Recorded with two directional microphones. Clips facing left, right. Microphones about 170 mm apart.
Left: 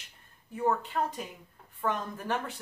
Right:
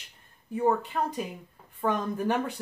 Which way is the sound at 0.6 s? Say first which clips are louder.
Right 3 dB; 15° right (ahead or behind).